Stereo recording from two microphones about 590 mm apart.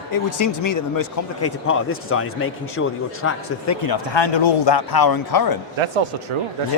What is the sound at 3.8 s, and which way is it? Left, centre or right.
Speech, left.